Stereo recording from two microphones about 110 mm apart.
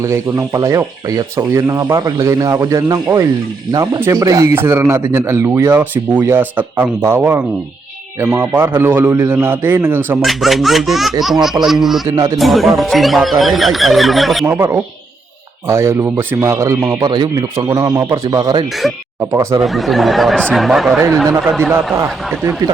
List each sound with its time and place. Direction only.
0.0 s speech: 30° right (ahead or behind)
10.2 s speech: centre (ahead or behind)
14.4 s speech: 25° right (ahead or behind)
18.8 s speech: centre (ahead or behind)
19.3 s speech: 25° right (ahead or behind)
19.6 s speech: centre (ahead or behind)
21.6 s speech: 20° right (ahead or behind)